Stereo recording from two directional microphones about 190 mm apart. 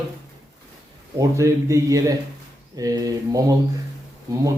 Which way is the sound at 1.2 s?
15° right (ahead or behind).